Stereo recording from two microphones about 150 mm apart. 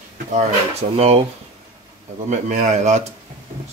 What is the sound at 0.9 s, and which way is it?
Speech, 40° right (ahead or behind).